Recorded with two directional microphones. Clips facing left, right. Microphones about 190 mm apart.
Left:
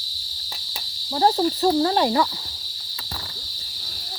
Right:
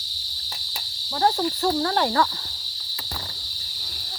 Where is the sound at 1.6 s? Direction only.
20° left (ahead or behind).